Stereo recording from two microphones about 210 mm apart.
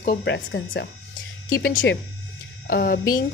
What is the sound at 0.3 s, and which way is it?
Speech, 55° left (ahead or behind).